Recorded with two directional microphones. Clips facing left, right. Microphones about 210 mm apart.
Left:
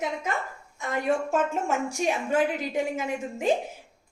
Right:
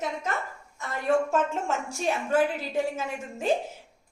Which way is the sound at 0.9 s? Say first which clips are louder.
Right 1 dB; 10° left (ahead or behind).